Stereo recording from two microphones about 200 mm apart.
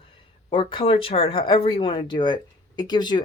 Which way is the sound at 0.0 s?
25° left (ahead or behind).